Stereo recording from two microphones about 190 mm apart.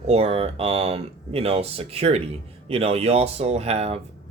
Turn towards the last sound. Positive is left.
turn(degrees=-35)  # may be behind; listen again after turning